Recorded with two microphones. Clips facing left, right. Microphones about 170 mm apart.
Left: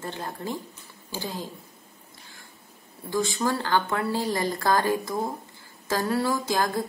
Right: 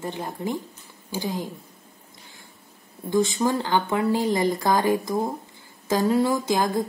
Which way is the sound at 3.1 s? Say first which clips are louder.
Right 4 dB; 20° right (ahead or behind).